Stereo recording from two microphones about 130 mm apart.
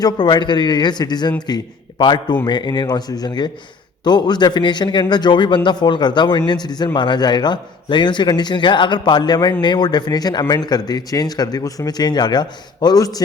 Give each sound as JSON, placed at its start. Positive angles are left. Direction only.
{"t": 0.0, "sound": "a man's voice", "side_deg": 35}